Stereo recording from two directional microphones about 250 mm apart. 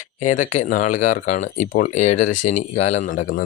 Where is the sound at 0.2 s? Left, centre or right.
Left.